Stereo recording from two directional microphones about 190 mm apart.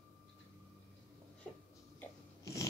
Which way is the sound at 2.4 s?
15° left (ahead or behind).